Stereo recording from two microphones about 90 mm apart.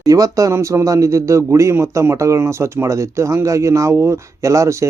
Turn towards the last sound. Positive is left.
turn(degrees=-35)  # may be behind; listen again after turning